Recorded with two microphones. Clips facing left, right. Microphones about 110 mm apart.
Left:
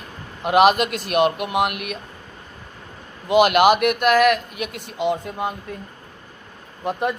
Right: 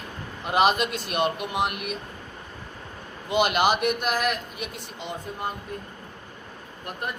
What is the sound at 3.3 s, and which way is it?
Speech, 70° left (ahead or behind).